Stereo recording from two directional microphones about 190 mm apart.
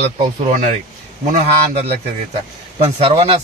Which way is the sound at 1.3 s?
35° right (ahead or behind).